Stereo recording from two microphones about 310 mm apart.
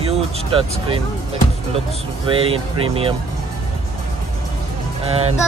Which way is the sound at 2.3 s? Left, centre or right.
Centre.